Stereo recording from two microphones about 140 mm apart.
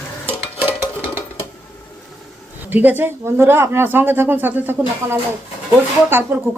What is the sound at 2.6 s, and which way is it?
Speech, 10° right (ahead or behind).